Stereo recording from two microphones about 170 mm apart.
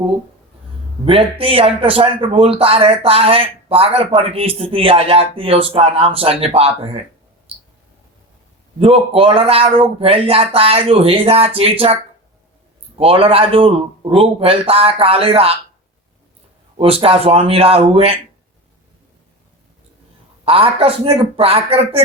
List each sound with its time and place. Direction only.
1.0 s speech: 35° right (ahead or behind)
8.8 s speech: 35° right (ahead or behind)
13.0 s speech: 35° right (ahead or behind)
16.7 s speech: 35° right (ahead or behind)
20.4 s speech: 35° right (ahead or behind)